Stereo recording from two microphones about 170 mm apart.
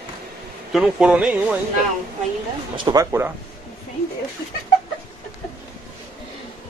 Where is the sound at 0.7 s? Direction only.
5° right (ahead or behind).